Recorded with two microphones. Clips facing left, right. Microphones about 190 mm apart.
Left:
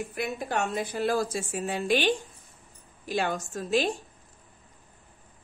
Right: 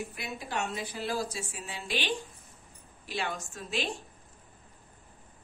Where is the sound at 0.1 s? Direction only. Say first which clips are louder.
Left 7 dB; 50° left (ahead or behind).